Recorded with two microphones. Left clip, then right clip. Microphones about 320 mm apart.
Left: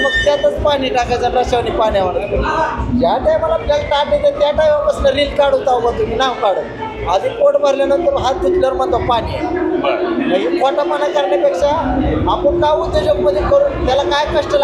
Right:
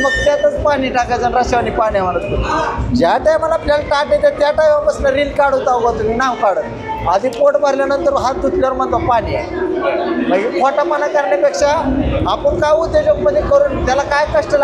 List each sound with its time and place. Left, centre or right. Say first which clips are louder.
0.3 s speech: even; right
3.0 s speech: right 1 dB; right
7.1 s speech: even; right
10.3 s speech: right 1 dB; right